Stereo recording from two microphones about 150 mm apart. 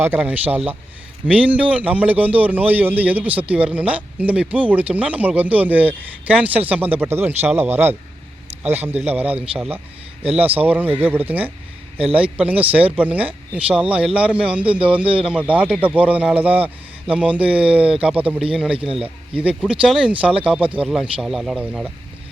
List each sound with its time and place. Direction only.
0.0 s speech: 10° right (ahead or behind)
15.0 s speech: 35° right (ahead or behind)
15.3 s speech: 10° right (ahead or behind)